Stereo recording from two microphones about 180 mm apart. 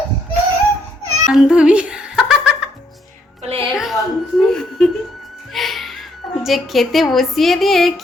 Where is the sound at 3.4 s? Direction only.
35° right (ahead or behind).